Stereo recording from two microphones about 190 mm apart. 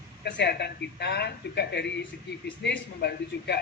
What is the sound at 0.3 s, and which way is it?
Speech, 65° left (ahead or behind).